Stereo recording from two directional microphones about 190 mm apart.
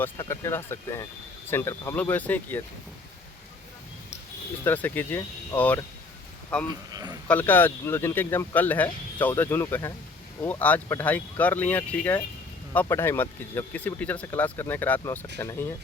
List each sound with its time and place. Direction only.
0.0 s speech: 15° left (ahead or behind)
4.6 s speech: 10° left (ahead or behind)
6.9 s speech: 20° right (ahead or behind)
7.3 s speech: 10° left (ahead or behind)